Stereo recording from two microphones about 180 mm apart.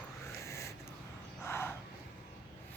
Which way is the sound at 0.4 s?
15° left (ahead or behind).